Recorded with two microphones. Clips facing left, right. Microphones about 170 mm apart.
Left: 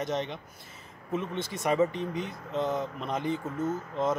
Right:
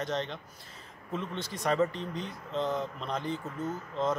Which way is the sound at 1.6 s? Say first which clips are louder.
Left 2 dB; 10° left (ahead or behind).